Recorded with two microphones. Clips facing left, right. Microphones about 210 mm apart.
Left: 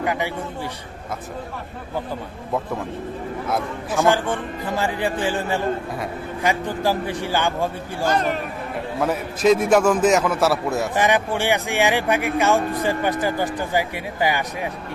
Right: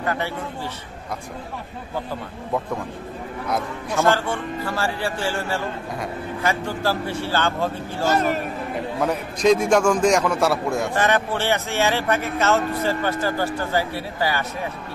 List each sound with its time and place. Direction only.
0.0 s a man's voice: 15° left (ahead or behind)
3.4 s a man's voice: centre (ahead or behind)
4.0 s a man's voice: 15° left (ahead or behind)